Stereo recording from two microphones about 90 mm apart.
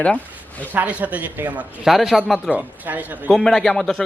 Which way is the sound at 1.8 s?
Centre (ahead or behind).